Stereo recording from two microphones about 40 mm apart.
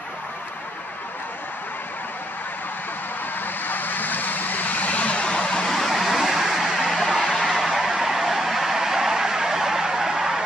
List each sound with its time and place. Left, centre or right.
3.6 s vehicle: left; by 5.9 s centre
5.9 s vehicle: centre
7.0 s music: centre
7.5 s vehicle: centre